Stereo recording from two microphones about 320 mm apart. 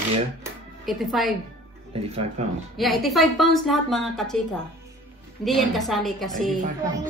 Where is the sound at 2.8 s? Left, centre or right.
Centre.